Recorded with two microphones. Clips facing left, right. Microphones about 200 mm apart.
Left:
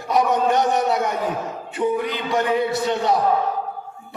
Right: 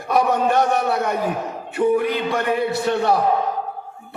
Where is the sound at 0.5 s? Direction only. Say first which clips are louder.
Even; 20° left (ahead or behind).